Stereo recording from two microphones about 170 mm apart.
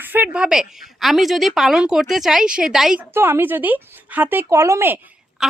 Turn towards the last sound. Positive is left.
turn(degrees=-15)  # may be behind; listen again after turning